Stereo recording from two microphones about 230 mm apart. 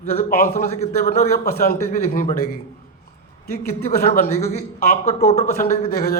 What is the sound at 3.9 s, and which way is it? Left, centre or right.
A man's voice, left.